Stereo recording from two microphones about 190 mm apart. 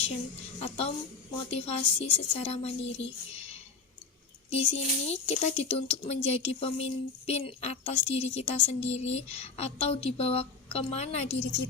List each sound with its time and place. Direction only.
0.6 s speech: 30° left (ahead or behind)